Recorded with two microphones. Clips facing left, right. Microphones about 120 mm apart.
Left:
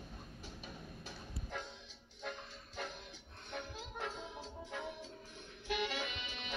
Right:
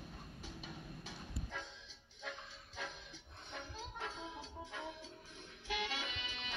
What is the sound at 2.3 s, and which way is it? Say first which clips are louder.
Music: left 3 dB; 55° left (ahead or behind).